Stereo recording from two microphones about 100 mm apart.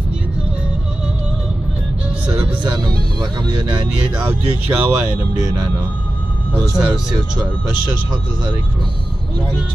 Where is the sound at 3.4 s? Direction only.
50° right (ahead or behind).